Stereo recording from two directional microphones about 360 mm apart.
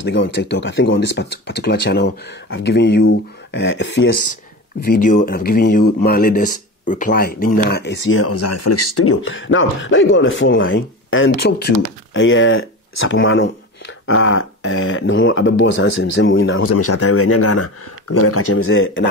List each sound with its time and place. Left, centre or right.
0.0 s speech: left
8.1 s speech: left